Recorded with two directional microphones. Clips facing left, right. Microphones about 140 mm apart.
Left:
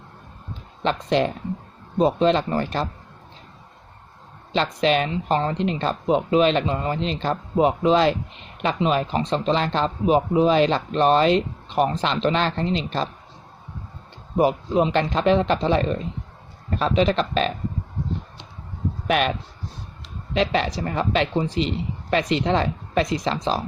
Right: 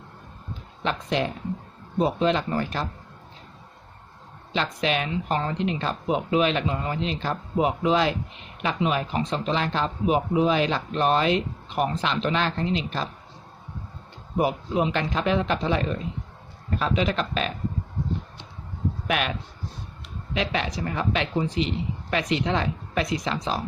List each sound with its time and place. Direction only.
0.8 s speech: 35° left (ahead or behind)
4.5 s speech: 35° left (ahead or behind)
14.3 s speech: 35° left (ahead or behind)
19.0 s speech: 35° left (ahead or behind)
20.3 s speech: 35° left (ahead or behind)